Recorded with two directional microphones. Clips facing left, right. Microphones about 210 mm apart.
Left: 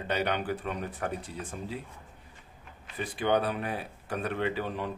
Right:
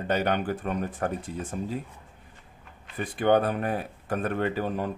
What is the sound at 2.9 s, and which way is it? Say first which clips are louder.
Speech: right 5 dB; 50° right (ahead or behind).